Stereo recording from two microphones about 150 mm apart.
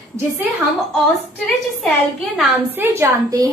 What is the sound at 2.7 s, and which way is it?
Speech, 20° right (ahead or behind).